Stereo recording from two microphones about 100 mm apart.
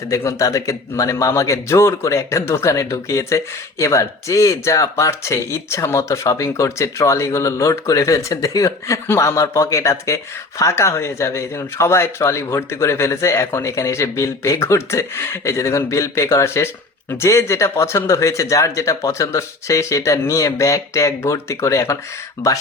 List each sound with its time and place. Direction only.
0.1 s speech: 30° left (ahead or behind)